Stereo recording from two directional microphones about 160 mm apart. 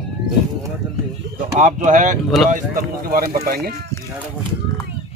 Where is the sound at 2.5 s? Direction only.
60° right (ahead or behind).